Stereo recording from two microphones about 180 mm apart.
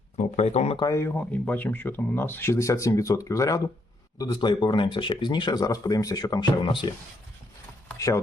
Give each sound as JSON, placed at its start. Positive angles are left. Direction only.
{"t": 0.2, "sound": "speech", "side_deg": 40}
{"t": 0.8, "sound": "speech", "side_deg": 15}
{"t": 7.9, "sound": "speech", "side_deg": 20}